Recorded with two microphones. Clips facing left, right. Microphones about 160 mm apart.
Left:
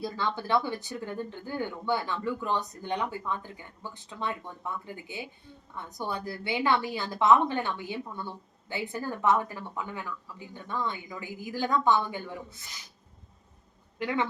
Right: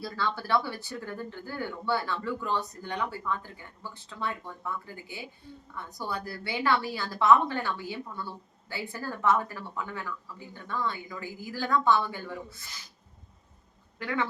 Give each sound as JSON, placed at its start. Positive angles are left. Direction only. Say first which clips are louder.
{"t": 0.0, "sound": "speech", "louder": "left 1 dB", "side_deg": 20}
{"t": 14.0, "sound": "speech", "louder": "left 2 dB", "side_deg": 20}